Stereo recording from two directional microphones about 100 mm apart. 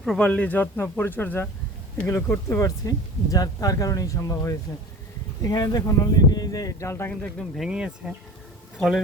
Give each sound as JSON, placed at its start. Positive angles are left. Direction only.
{"t": 0.2, "sound": "speech", "side_deg": 15}
{"t": 7.1, "sound": "speech", "side_deg": 10}
{"t": 7.6, "sound": "speech", "side_deg": -10}